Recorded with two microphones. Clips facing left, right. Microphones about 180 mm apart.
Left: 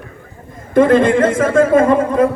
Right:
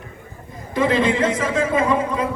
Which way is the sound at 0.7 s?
50° left (ahead or behind).